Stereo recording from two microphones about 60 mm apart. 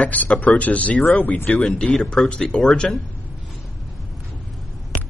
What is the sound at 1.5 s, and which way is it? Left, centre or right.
Speech, centre.